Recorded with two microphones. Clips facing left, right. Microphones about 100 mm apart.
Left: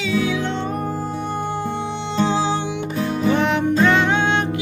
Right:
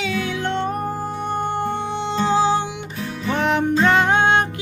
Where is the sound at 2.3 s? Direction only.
45° right (ahead or behind).